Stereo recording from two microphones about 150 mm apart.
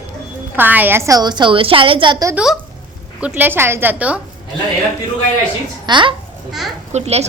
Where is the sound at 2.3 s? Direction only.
5° right (ahead or behind).